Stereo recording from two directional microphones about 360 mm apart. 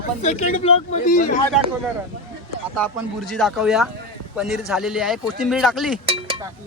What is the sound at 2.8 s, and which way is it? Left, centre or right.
Speech, centre.